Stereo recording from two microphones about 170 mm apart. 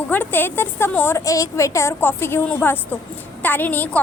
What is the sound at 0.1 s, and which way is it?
A woman's voice, 10° left (ahead or behind).